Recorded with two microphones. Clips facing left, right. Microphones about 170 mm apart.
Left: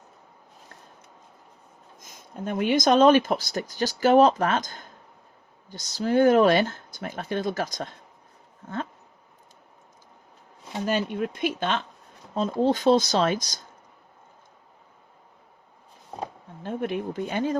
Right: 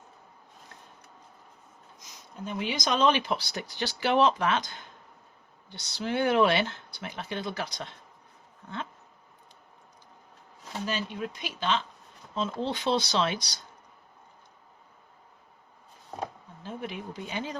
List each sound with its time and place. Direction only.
2.0 s speech: 50° left (ahead or behind)
8.6 s a sound: 45° left (ahead or behind)
10.8 s speech: 55° left (ahead or behind)
12.3 s speech: 45° left (ahead or behind)
16.6 s speech: 55° left (ahead or behind)